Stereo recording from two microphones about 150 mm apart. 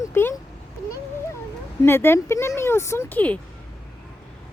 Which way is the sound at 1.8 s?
15° left (ahead or behind).